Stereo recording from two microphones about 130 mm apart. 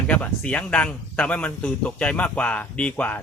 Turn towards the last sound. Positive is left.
turn(degrees=10)  # may be behind; listen again after turning